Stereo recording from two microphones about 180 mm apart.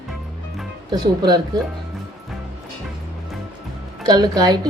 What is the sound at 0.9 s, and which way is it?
Speech, 25° right (ahead or behind).